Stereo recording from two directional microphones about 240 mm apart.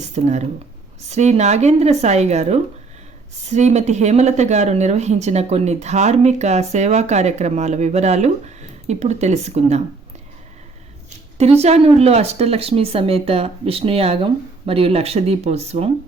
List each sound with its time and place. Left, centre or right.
0.0 s speech: right
11.6 s speech: right